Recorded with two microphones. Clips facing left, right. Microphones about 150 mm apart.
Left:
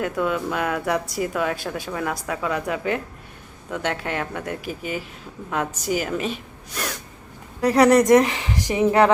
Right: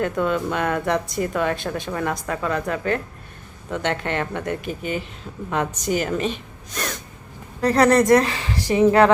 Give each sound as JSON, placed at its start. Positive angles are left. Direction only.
{"t": 0.0, "sound": "a woman's voice", "side_deg": 5}